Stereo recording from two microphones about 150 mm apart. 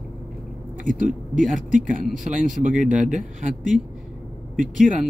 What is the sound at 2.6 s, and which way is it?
Speech, 60° right (ahead or behind).